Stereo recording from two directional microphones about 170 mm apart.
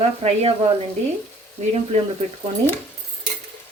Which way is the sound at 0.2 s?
35° right (ahead or behind).